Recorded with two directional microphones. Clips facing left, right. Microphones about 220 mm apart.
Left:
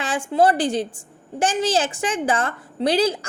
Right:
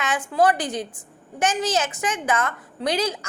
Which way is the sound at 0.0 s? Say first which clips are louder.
Left 2 dB; 30° left (ahead or behind).